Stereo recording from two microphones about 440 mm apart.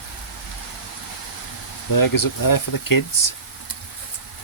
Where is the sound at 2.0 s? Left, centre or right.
Left.